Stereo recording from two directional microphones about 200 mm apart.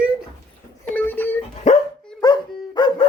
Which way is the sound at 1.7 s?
35° left (ahead or behind).